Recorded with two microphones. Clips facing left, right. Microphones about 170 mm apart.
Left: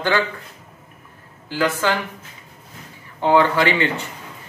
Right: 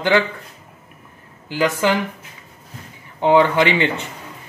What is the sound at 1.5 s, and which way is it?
Speech, 15° right (ahead or behind).